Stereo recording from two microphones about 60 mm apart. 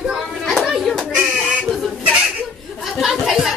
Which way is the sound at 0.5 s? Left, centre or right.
Centre.